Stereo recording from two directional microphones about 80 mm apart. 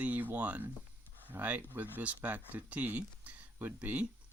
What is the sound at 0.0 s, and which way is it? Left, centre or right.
Speech, right.